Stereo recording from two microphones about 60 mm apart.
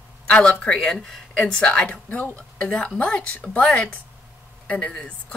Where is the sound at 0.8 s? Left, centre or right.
Centre.